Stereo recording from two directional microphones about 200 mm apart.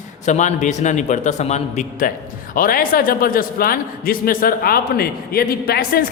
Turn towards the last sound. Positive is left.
turn(degrees=50)  # may be behind; listen again after turning